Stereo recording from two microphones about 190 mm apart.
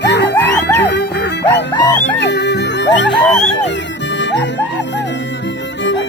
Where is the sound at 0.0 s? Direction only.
65° left (ahead or behind).